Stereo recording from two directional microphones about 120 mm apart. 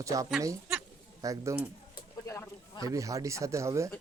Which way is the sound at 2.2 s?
20° left (ahead or behind).